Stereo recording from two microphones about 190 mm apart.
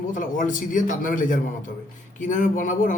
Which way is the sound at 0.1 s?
45° left (ahead or behind).